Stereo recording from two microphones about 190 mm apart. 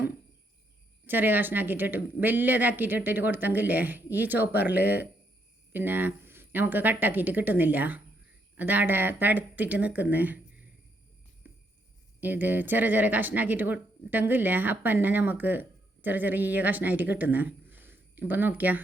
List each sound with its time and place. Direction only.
1.0 s a woman's voice: 10° right (ahead or behind)
11.4 s jingle bell: 10° right (ahead or behind)
12.2 s a woman's voice: 10° right (ahead or behind)